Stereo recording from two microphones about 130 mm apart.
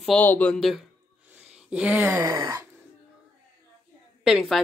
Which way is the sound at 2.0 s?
25° right (ahead or behind).